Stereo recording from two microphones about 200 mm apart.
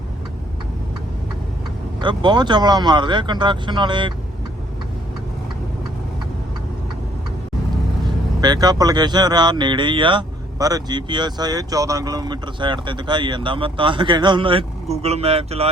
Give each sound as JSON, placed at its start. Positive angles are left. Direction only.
{"t": 2.0, "sound": "speech", "side_deg": -25}
{"t": 8.4, "sound": "speech", "side_deg": -20}